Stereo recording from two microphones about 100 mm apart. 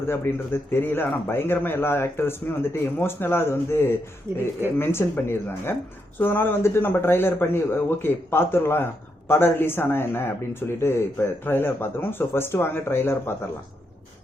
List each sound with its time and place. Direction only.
0.0 s speech: 25° left (ahead or behind)